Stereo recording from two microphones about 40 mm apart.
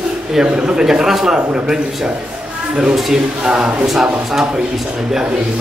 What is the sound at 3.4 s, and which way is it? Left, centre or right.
Speech, centre.